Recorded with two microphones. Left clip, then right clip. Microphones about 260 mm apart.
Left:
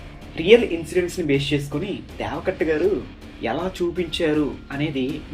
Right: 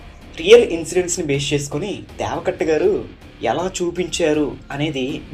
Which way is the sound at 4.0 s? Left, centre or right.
Centre.